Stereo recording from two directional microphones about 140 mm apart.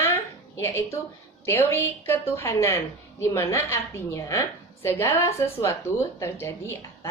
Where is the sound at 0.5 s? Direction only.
20° left (ahead or behind).